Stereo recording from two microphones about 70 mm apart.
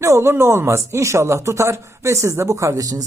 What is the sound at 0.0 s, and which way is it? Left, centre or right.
Speech, right.